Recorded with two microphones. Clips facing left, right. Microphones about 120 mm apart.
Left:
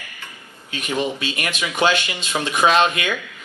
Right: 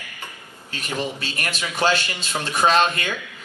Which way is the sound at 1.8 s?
20° left (ahead or behind).